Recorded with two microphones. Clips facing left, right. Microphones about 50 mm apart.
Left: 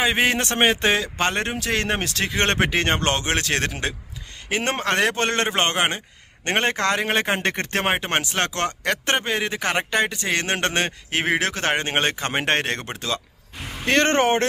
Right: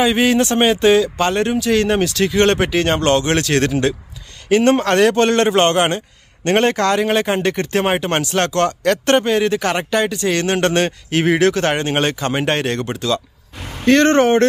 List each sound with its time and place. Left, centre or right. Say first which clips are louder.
0.0 s speech: right 6 dB; left
7.8 s speech: right 3 dB; centre